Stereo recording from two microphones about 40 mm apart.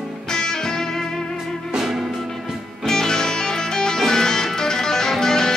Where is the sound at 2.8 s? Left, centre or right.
Centre.